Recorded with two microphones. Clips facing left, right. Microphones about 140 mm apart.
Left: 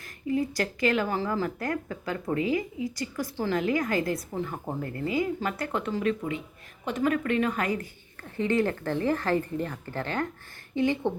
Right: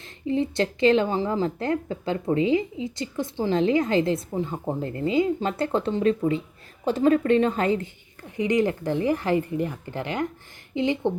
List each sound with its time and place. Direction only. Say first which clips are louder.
0.0 s speech: right 3 dB; 25° right (ahead or behind)
8.4 s speech: right 3 dB; 15° right (ahead or behind)